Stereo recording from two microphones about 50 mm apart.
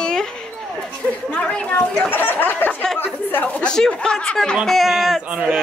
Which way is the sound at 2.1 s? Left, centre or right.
Left.